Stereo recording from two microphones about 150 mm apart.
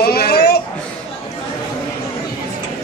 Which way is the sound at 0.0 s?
90° left.